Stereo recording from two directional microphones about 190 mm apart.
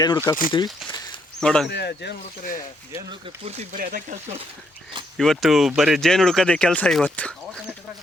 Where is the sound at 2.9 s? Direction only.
25° right (ahead or behind).